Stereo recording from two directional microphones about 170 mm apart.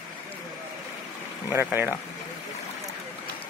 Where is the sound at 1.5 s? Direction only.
10° right (ahead or behind).